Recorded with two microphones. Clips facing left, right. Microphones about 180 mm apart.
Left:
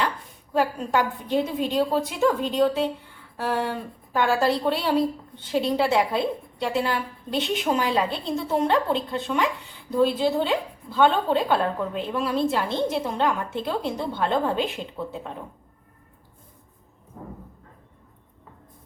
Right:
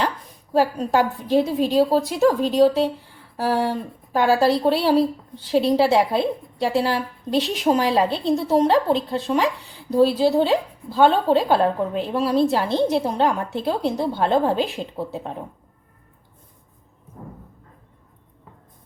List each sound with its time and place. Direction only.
0.5 s a woman's voice: 35° right (ahead or behind)